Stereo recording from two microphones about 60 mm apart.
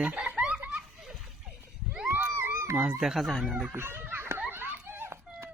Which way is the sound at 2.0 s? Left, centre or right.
Right.